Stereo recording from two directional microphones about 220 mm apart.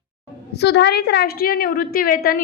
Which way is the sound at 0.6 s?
50° left (ahead or behind).